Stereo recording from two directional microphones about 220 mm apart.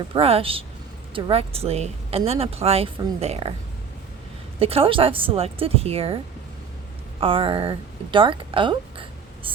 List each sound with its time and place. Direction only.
0.1 s speech: 25° right (ahead or behind)
4.6 s speech: 25° right (ahead or behind)
7.2 s a woman's voice: 25° right (ahead or behind)